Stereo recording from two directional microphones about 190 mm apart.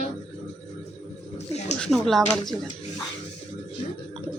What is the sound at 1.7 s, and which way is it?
Speech, 5° left (ahead or behind).